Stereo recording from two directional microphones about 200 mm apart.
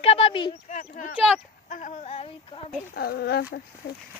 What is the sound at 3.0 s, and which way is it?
Speech, 50° left (ahead or behind).